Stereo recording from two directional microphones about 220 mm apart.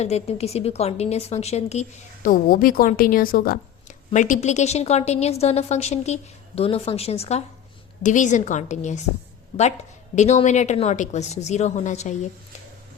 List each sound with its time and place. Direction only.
0.0 s a woman's voice: 30° left (ahead or behind)